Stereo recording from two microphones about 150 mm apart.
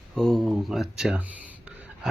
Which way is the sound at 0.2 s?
Centre (ahead or behind).